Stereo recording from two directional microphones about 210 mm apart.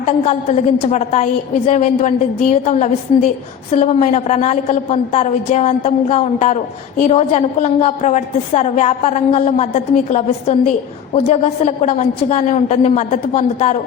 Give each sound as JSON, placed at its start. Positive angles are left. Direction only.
{"t": 0.3, "sound": "a woman's voice", "side_deg": 30}